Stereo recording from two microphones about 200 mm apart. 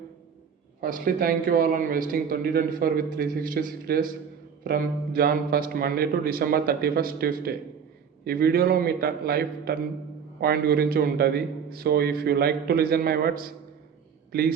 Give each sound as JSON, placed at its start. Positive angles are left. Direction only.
{"t": 0.8, "sound": "a man's voice", "side_deg": -45}